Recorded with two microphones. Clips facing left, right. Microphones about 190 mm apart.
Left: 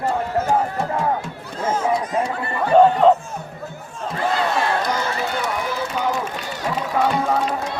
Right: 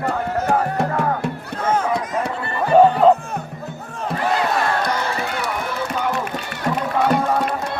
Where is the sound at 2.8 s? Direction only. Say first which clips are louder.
Right 1 dB; 5° right (ahead or behind).